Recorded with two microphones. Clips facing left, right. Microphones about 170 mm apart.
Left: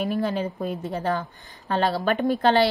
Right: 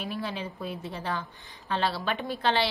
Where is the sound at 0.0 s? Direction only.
45° left (ahead or behind).